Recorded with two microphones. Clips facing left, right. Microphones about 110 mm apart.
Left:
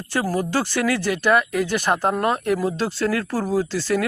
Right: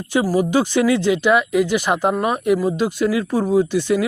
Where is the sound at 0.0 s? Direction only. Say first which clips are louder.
Right 5 dB; 15° right (ahead or behind).